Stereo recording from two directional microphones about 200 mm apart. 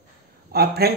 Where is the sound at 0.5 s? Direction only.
50° right (ahead or behind).